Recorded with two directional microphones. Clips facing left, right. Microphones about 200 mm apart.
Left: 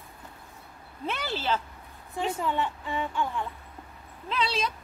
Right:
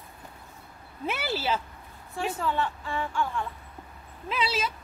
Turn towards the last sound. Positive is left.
turn(degrees=-5)  # may be behind; listen again after turning